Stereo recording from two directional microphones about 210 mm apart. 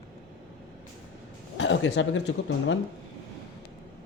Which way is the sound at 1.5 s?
60° left (ahead or behind).